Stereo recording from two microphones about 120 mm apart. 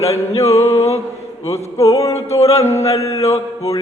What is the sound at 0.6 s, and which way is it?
Speech, 60° left (ahead or behind).